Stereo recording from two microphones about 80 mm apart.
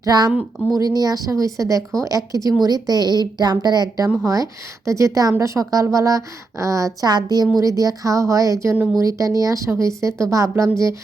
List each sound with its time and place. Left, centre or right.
0.0 s a woman's voice: right
7.1 s speech: right
7.6 s a woman's voice: right